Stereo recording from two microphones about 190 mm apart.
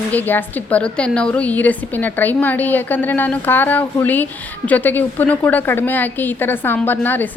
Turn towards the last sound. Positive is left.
turn(degrees=10)  # may be behind; listen again after turning